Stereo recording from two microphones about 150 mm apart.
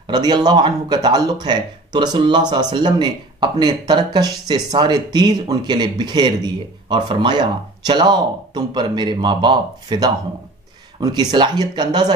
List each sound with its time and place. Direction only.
0.0 s speech: 30° right (ahead or behind)